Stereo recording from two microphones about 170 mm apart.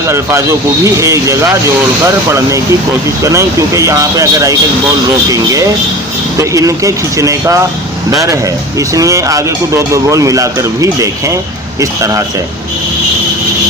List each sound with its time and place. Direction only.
0.1 s speech: 15° right (ahead or behind)